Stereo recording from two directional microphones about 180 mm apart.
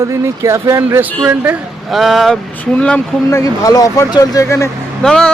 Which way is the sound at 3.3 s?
20° left (ahead or behind).